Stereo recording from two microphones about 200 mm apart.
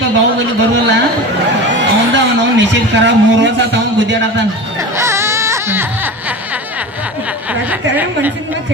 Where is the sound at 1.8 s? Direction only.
65° right (ahead or behind).